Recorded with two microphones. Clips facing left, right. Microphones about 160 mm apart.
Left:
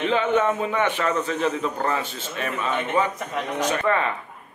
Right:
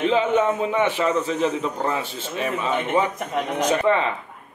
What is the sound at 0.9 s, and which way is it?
A man's voice, 10° right (ahead or behind).